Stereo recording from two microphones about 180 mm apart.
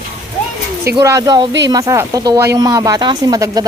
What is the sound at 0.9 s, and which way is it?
Speech, 20° right (ahead or behind).